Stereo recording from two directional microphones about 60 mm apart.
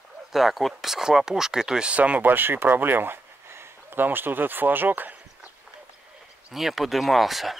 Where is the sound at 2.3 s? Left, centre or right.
Right.